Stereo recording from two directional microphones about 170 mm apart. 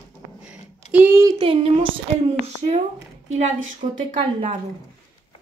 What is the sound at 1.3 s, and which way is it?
Speech, 35° right (ahead or behind).